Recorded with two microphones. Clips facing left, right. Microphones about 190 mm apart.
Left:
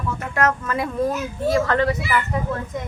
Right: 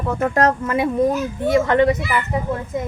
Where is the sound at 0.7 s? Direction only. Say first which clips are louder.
Right 5 dB; 25° right (ahead or behind).